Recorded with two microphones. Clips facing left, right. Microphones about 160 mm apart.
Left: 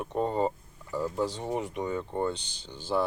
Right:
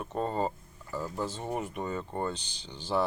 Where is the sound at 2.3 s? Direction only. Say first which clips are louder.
Left 3 dB; 60° left (ahead or behind).